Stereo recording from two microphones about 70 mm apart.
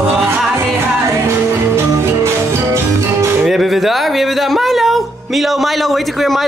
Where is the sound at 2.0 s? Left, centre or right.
Right.